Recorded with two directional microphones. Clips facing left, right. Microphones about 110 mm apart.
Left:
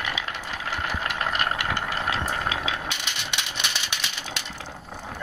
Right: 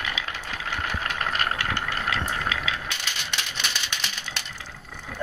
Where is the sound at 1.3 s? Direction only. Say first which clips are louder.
Left 1 dB; 20° left (ahead or behind).